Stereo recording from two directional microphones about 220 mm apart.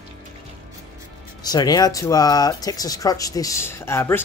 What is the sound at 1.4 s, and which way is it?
Speech, 20° left (ahead or behind).